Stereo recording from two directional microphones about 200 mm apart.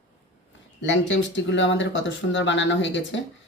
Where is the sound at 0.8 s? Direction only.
65° left (ahead or behind).